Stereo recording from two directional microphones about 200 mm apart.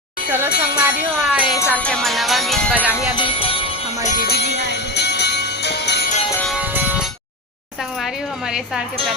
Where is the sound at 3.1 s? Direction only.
25° left (ahead or behind).